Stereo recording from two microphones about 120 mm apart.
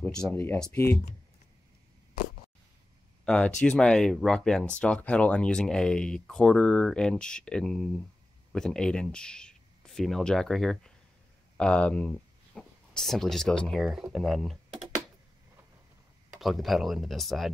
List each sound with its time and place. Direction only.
0.3 s speech: 20° left (ahead or behind)
3.3 s speech: 10° left (ahead or behind)
16.3 s speech: centre (ahead or behind)